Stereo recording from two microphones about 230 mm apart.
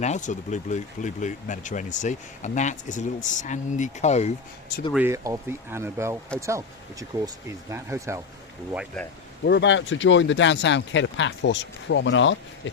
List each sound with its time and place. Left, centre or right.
0.0 s speech: left
4.9 s speech: centre
9.4 s speech: left